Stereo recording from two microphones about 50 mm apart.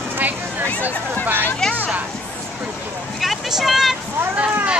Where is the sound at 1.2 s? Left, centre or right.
Right.